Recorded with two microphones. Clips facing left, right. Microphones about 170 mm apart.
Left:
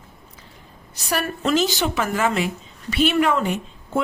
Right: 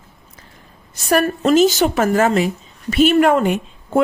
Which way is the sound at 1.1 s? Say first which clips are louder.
Right 7 dB; 45° right (ahead or behind).